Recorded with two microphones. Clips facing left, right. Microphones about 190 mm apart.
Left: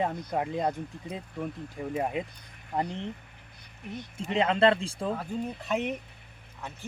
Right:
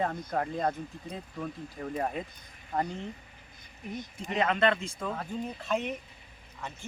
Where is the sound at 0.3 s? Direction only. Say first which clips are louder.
Left 1 dB; 15° left (ahead or behind).